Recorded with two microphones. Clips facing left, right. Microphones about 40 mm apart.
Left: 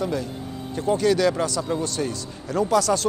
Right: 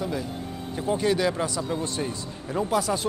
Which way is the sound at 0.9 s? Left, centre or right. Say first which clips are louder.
Left 4 dB; right.